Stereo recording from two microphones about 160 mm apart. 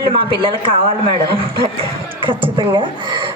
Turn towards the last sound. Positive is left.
turn(degrees=-30)  # may be behind; listen again after turning